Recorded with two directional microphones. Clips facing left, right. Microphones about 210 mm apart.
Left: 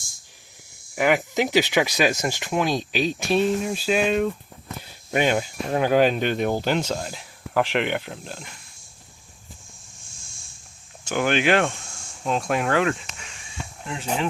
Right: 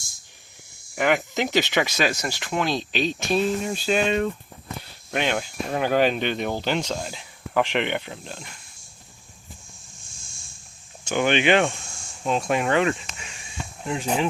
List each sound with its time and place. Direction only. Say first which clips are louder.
0.9 s speech: left 2 dB; 10° left (ahead or behind)
11.0 s speech: right 1 dB; centre (ahead or behind)
13.8 s speech: right 3 dB; 15° right (ahead or behind)